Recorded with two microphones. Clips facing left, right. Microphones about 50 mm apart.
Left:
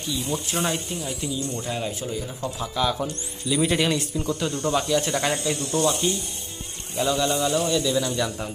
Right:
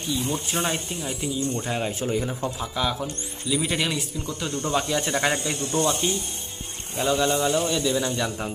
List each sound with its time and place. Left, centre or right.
0.0 s speech: right
2.7 s a man's voice: centre
4.5 s speech: right
7.5 s a man's voice: right
7.8 s speech: right